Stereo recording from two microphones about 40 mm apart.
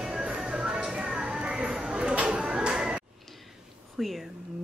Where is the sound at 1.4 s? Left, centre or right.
Right.